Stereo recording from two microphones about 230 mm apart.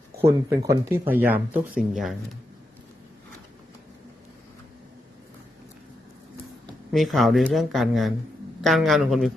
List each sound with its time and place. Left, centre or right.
0.3 s speech: centre
6.9 s speech: centre